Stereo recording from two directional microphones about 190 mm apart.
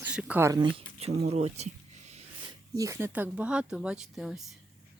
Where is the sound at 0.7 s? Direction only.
35° right (ahead or behind).